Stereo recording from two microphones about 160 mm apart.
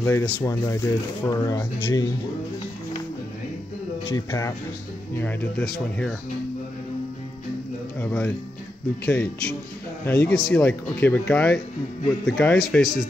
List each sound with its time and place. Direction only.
0.0 s speech: 15° left (ahead or behind)
4.1 s speech: 20° left (ahead or behind); by 6.1 s 5° left (ahead or behind)
8.0 s speech: 10° left (ahead or behind)